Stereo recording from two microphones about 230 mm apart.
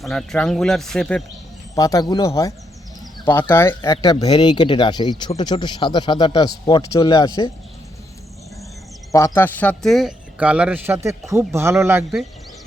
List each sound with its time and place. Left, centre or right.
0.0 s speech: centre
1.7 s speech: centre
9.1 s speech: centre